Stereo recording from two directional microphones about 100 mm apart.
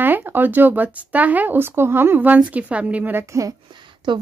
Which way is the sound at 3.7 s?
50° right (ahead or behind).